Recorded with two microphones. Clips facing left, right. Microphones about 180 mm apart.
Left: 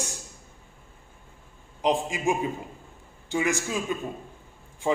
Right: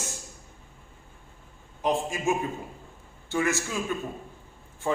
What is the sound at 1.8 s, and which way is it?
Speech, 15° left (ahead or behind).